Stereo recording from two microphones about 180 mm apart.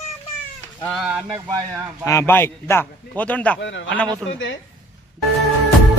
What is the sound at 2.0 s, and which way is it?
A man's voice, 15° left (ahead or behind).